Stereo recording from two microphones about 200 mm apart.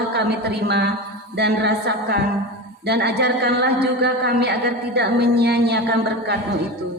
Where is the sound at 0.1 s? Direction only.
55° right (ahead or behind).